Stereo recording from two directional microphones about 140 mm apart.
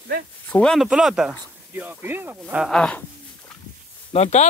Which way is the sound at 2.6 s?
5° left (ahead or behind).